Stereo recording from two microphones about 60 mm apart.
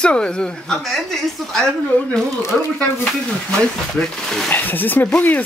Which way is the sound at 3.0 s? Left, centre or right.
Centre.